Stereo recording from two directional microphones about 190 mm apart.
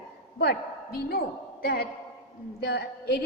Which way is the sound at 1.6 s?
55° left (ahead or behind).